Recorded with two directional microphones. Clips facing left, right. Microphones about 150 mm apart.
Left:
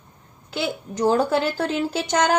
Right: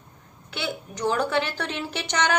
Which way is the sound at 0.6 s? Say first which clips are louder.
Left 5 dB; 40° left (ahead or behind).